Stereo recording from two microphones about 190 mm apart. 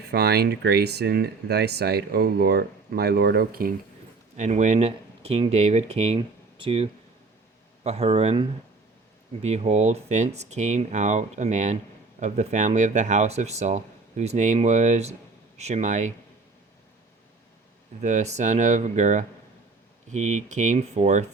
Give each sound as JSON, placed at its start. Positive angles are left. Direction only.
{"t": 0.0, "sound": "speech", "side_deg": -55}
{"t": 4.4, "sound": "speech", "side_deg": -40}
{"t": 7.9, "sound": "speech", "side_deg": -30}
{"t": 18.0, "sound": "speech", "side_deg": -35}